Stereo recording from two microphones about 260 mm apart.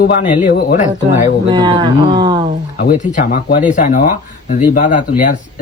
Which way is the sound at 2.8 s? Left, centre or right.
Left.